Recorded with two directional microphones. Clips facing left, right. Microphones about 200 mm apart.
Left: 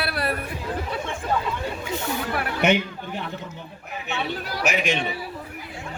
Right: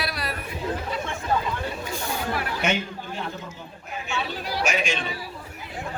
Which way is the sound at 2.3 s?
65° left (ahead or behind).